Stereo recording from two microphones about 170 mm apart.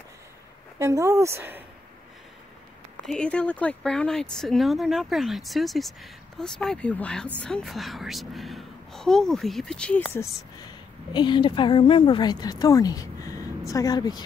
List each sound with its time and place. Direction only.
0.7 s speech: 15° right (ahead or behind)
3.1 s speech: 5° left (ahead or behind)
11.1 s a woman's voice: 25° left (ahead or behind)